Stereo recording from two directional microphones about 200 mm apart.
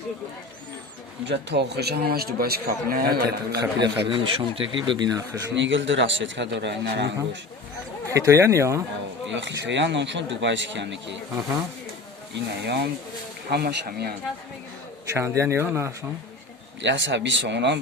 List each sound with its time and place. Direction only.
1.2 s a man's voice: 60° right (ahead or behind)
3.8 s speech: 20° right (ahead or behind)
5.5 s speech: 65° right (ahead or behind)
8.1 s speech: 15° right (ahead or behind)
9.2 s speech: 65° right (ahead or behind)
12.3 s a man's voice: 55° right (ahead or behind)
15.1 s speech: 15° right (ahead or behind)
16.8 s speech: 65° right (ahead or behind)